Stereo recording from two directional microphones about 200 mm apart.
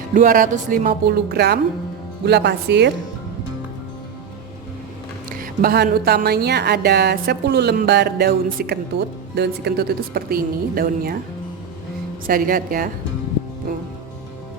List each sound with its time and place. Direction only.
0.1 s a woman's voice: 40° right (ahead or behind); by 2.9 s 55° right (ahead or behind)
5.4 s a woman's voice: 50° right (ahead or behind)
12.2 s a woman's voice: 45° right (ahead or behind)